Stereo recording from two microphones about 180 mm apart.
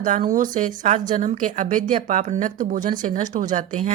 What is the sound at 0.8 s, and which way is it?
Speech, 45° right (ahead or behind).